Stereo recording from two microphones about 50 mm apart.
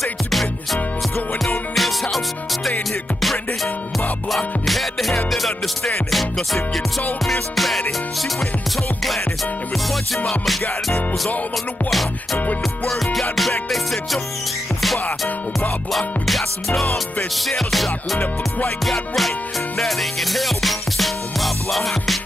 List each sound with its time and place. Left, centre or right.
0.0 s music: centre
1.8 s music: centre
4.6 s music: centre
10.1 s music: centre
12.8 s music: centre
16.3 s music: centre